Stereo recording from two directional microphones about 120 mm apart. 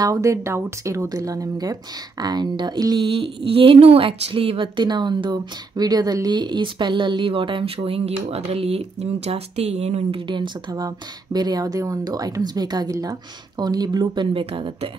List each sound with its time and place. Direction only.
0.0 s speech: 30° right (ahead or behind)
3.4 s a woman's voice: 50° right (ahead or behind)
10.2 s speech: 40° right (ahead or behind)